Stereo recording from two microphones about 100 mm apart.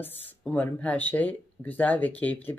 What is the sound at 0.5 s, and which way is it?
Speech, 15° left (ahead or behind).